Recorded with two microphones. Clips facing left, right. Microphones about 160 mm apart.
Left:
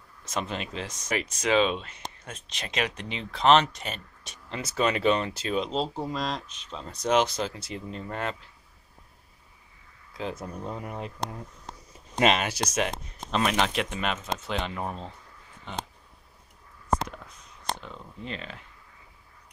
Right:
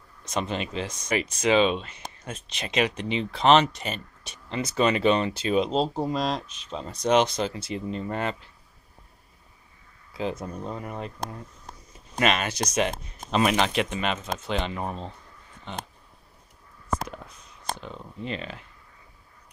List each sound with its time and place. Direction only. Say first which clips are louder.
0.2 s speech: right 3 dB; centre (ahead or behind)
5.6 s speech: right 5 dB; 20° right (ahead or behind)
6.9 s speech: right 2 dB; centre (ahead or behind)
10.1 s speech: right 4 dB; centre (ahead or behind)
12.2 s speech: left 1 dB; 25° left (ahead or behind)
12.4 s speech: right 2 dB; 5° left (ahead or behind)
18.2 s speech: right 4 dB; 5° right (ahead or behind)